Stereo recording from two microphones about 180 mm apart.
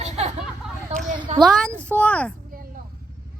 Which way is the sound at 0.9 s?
35° right (ahead or behind).